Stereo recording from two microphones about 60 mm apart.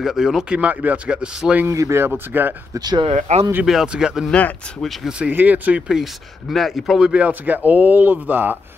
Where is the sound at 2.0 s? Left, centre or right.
Right.